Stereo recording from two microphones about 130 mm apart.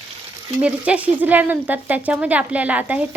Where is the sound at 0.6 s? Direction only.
10° right (ahead or behind).